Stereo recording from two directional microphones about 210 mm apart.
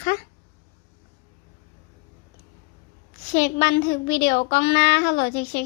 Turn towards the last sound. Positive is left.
turn(degrees=50)  # may be behind; listen again after turning